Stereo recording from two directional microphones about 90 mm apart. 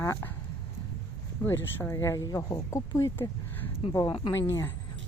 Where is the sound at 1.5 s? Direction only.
30° left (ahead or behind).